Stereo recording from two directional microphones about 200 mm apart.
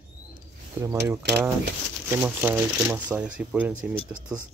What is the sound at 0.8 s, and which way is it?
Speech, 10° right (ahead or behind).